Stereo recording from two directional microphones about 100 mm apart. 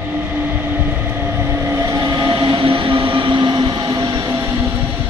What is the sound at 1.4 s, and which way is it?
Train, 25° right (ahead or behind).